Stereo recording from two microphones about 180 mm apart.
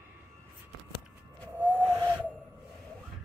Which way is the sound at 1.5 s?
10° right (ahead or behind).